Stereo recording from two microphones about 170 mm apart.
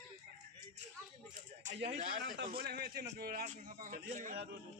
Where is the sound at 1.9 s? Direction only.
40° right (ahead or behind).